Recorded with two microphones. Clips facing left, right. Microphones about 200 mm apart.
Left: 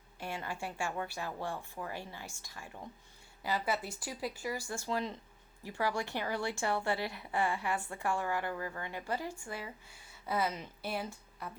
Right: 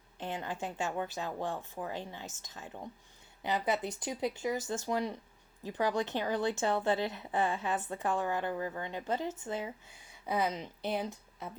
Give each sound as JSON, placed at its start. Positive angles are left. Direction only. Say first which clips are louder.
{"t": 0.2, "sound": "speech", "louder": "right 2 dB", "side_deg": -20}